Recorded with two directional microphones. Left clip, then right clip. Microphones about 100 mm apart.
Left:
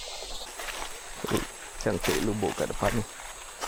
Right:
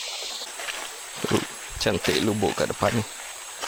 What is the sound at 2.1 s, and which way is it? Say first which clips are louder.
Speech: right 5 dB; 40° right (ahead or behind).